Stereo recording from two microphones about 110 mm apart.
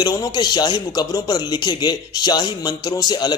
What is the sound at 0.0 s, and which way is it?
Speech, 35° left (ahead or behind).